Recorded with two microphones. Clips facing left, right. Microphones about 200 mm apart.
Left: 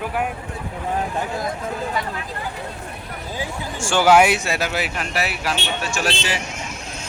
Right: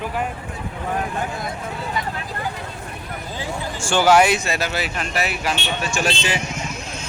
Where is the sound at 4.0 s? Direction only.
10° left (ahead or behind).